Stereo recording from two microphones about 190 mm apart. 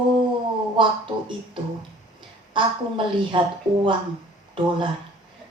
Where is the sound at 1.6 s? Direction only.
25° right (ahead or behind).